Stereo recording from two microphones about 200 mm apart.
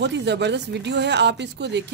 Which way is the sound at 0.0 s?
60° right (ahead or behind).